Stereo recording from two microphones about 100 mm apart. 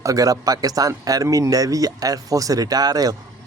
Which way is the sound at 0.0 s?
35° right (ahead or behind).